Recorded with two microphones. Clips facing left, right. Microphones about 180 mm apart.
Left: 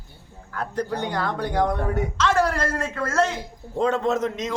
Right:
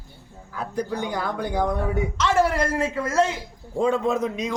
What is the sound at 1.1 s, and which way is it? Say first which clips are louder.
A man's voice: left 1 dB; 10° right (ahead or behind).